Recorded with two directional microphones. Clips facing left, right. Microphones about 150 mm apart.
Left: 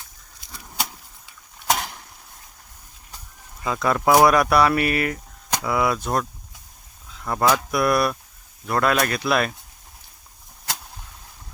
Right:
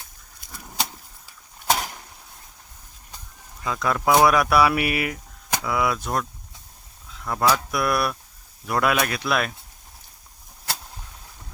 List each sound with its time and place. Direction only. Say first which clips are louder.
0.4 s vehicle: even; 50° right (ahead or behind)
1.7 s a sound: even; centre (ahead or behind)
3.6 s speech: left 2 dB; 5° left (ahead or behind)
7.3 s speech: left 2 dB; 5° left (ahead or behind)